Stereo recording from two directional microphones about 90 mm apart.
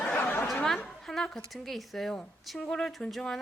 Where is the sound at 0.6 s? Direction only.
5° left (ahead or behind).